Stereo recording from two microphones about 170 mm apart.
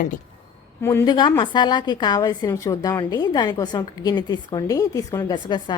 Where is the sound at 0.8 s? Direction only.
15° left (ahead or behind).